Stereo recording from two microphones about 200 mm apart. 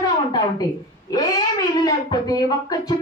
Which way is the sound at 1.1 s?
20° left (ahead or behind).